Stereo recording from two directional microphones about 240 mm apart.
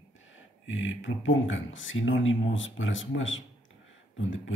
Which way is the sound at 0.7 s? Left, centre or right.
Left.